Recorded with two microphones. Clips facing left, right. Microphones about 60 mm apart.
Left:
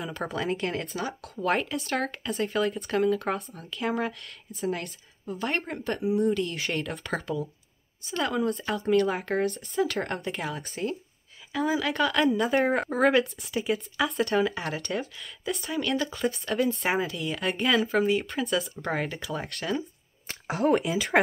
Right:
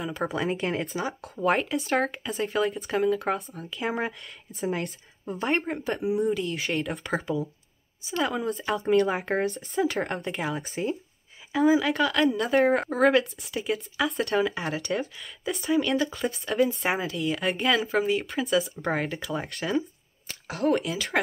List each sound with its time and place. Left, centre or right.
0.0 s a woman's voice: centre
4.6 s speech: right
5.5 s a woman's voice: centre
9.1 s speech: centre
9.9 s a woman's voice: centre